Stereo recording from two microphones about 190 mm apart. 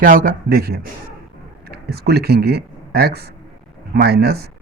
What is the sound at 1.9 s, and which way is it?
A man's voice, 55° right (ahead or behind).